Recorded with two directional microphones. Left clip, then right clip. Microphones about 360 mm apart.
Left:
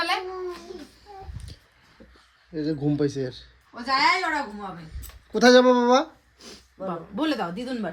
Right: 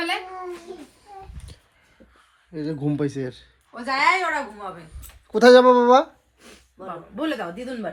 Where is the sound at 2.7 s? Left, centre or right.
Right.